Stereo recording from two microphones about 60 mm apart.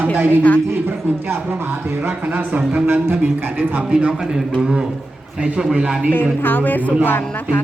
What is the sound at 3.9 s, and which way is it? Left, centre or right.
Speech, centre.